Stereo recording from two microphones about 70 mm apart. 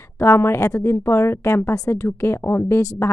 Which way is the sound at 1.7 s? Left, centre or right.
Left.